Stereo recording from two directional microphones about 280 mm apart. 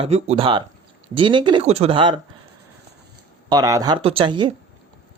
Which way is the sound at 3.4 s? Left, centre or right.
Centre.